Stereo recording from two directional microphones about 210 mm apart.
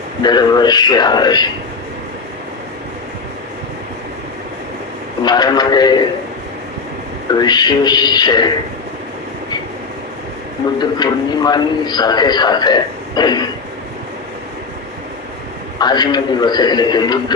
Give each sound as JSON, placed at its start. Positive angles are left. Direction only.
{"t": 0.2, "sound": "a man's voice", "side_deg": 20}
{"t": 5.2, "sound": "a man's voice", "side_deg": 20}
{"t": 7.3, "sound": "a man's voice", "side_deg": 20}
{"t": 10.8, "sound": "a man's voice", "side_deg": 20}
{"t": 15.8, "sound": "a man's voice", "side_deg": 20}